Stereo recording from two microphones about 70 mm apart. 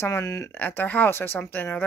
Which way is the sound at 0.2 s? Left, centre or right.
Left.